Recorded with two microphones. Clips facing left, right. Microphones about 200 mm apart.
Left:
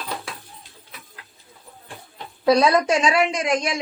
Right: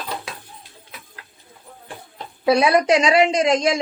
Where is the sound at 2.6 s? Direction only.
10° right (ahead or behind).